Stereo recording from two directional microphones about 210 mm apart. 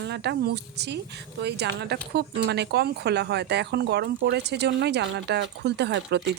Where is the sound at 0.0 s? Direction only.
55° right (ahead or behind).